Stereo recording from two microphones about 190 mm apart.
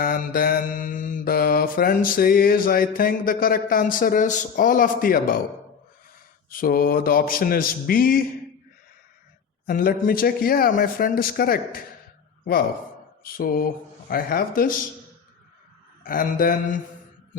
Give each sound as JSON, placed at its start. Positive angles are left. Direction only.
{"t": 0.0, "sound": "mantra", "side_deg": 50}
{"t": 6.5, "sound": "mantra", "side_deg": 50}
{"t": 9.6, "sound": "mantra", "side_deg": 50}
{"t": 13.2, "sound": "mantra", "side_deg": 50}
{"t": 16.0, "sound": "mantra", "side_deg": 45}